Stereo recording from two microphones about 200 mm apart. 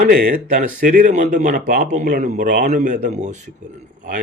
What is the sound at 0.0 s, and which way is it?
Speech, 50° right (ahead or behind).